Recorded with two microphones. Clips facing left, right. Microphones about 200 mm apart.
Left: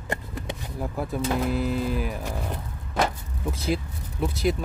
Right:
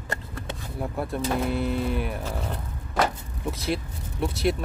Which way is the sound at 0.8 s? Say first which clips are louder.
Even; centre (ahead or behind).